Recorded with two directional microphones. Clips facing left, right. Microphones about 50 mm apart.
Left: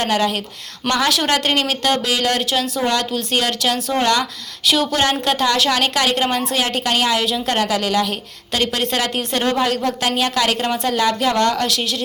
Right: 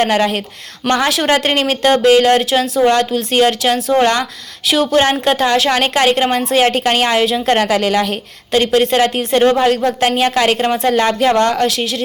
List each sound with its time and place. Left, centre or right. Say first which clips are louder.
0.0 s a woman's voice: right 4 dB; right
2.8 s a woman's voice: right 7 dB; right
4.6 s speech: right 3 dB; centre
4.9 s a woman's voice: right 5 dB; right
8.5 s a woman's voice: right 8 dB; right